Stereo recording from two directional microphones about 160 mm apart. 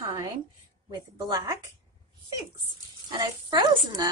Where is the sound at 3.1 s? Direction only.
25° right (ahead or behind).